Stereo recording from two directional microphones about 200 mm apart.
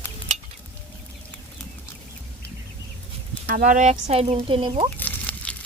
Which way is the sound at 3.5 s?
40° right (ahead or behind).